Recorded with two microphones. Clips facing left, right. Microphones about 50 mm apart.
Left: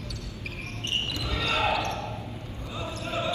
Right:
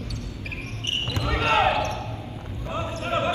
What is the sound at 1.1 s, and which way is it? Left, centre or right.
Basketball bounce, right.